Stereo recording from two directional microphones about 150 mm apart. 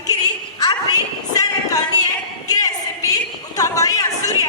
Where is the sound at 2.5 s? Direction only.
25° left (ahead or behind).